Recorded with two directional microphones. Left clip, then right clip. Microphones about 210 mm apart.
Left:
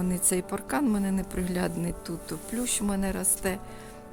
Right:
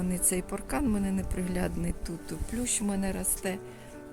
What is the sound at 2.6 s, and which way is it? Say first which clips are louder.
Speech: left 1 dB; 65° left (ahead or behind).